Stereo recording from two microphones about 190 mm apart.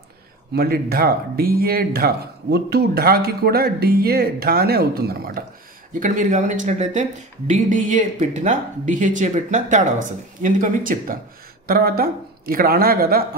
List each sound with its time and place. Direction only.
0.6 s speech: 55° right (ahead or behind)